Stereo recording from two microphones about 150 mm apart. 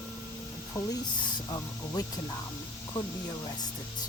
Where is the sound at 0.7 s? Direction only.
20° left (ahead or behind).